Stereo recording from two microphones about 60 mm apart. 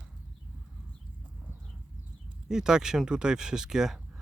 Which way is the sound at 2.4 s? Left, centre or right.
Centre.